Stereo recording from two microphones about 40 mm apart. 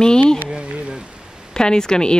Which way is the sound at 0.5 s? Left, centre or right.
Right.